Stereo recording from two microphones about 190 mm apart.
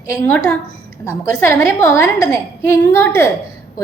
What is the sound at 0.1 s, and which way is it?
A woman's voice, 10° left (ahead or behind).